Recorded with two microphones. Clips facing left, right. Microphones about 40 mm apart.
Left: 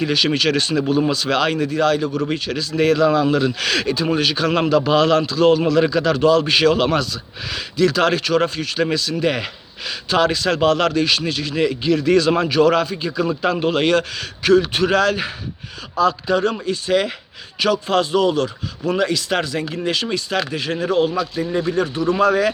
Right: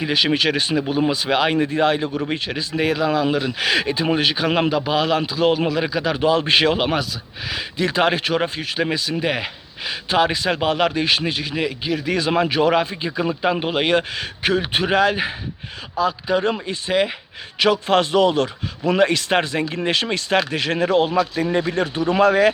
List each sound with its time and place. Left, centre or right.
0.0 s a man's voice: centre
6.7 s a man's voice: centre
7.8 s speech: right
11.5 s speech: centre
17.6 s a man's voice: right